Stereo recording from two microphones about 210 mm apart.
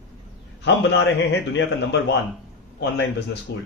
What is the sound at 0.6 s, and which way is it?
A man's voice, 55° left (ahead or behind).